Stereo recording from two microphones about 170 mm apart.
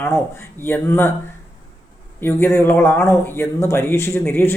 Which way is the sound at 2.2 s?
15° left (ahead or behind).